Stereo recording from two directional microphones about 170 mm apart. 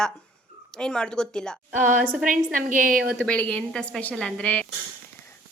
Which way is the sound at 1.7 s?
50° right (ahead or behind).